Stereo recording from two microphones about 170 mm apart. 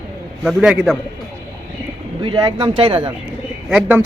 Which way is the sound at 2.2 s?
25° right (ahead or behind).